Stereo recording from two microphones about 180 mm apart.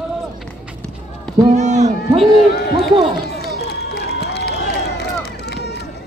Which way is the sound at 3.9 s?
65° left (ahead or behind).